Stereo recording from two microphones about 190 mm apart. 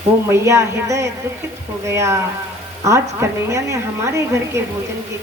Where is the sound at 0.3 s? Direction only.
15° right (ahead or behind).